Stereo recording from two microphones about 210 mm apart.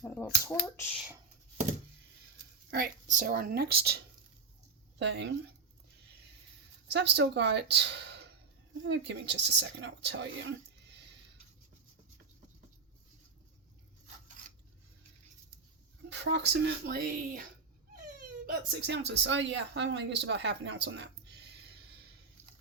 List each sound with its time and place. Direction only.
0.0 s speech: 10° left (ahead or behind)
2.6 s a woman's voice: 45° right (ahead or behind)
6.9 s a woman's voice: 55° right (ahead or behind)
16.0 s a woman's voice: 55° right (ahead or behind)